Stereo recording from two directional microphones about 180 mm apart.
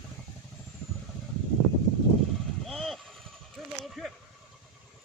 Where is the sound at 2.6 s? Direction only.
Centre (ahead or behind).